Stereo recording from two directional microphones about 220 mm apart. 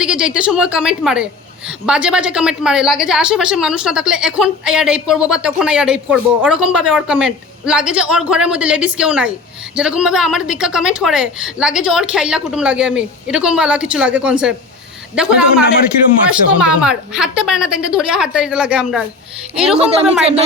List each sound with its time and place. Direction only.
0.0 s a woman's voice: 5° right (ahead or behind)